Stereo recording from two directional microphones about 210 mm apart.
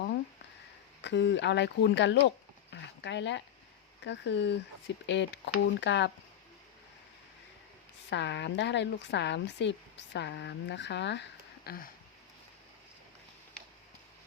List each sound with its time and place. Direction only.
1.0 s speech: 55° left (ahead or behind)
8.1 s speech: 55° left (ahead or behind)